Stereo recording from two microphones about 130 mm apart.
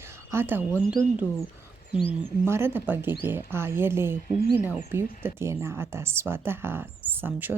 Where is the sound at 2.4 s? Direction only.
20° right (ahead or behind).